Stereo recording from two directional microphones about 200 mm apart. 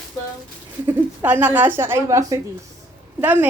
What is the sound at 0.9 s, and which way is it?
A woman's voice, 10° right (ahead or behind).